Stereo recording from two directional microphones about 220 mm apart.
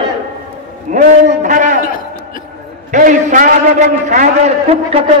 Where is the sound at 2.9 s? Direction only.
35° right (ahead or behind).